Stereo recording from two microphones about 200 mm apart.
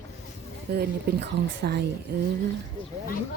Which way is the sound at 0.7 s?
50° right (ahead or behind).